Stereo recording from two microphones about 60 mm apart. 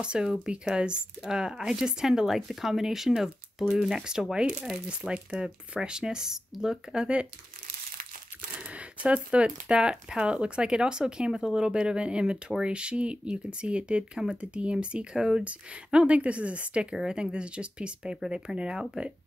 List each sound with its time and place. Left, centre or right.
0.0 s speech: centre
8.5 s speech: right